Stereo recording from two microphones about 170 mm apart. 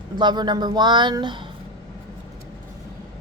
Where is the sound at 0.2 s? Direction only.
25° right (ahead or behind).